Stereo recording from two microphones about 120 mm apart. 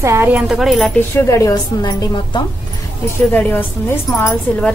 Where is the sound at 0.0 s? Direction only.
25° right (ahead or behind).